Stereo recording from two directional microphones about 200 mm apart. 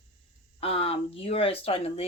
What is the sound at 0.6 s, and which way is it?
Speech, 30° left (ahead or behind).